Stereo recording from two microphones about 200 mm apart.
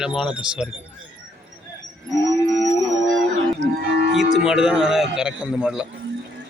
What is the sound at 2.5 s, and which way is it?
Howl, 20° left (ahead or behind).